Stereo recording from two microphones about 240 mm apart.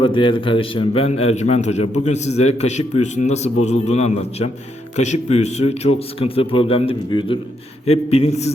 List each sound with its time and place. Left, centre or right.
0.0 s a man's voice: left